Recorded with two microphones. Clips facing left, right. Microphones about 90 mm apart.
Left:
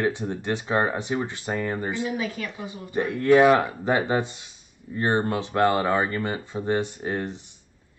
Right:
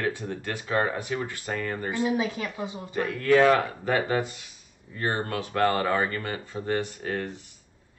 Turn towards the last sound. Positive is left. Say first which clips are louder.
# left 2 dB
turn(degrees=20)  # may be behind; listen again after turning